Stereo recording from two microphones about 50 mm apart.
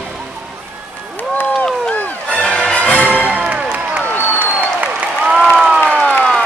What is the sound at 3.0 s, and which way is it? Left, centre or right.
Music, right.